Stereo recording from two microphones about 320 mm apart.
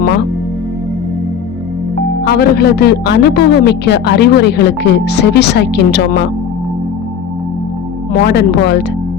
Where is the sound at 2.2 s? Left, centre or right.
Left.